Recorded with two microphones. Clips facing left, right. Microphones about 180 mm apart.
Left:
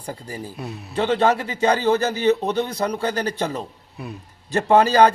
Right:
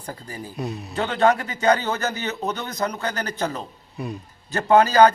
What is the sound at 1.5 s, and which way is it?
Speech, 30° left (ahead or behind).